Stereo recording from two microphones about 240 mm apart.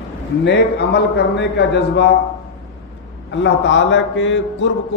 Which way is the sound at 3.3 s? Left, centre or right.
Left.